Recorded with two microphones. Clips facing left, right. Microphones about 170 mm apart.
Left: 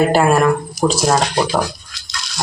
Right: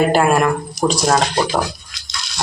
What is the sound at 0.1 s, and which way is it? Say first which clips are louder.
Speech: left 1 dB; centre (ahead or behind).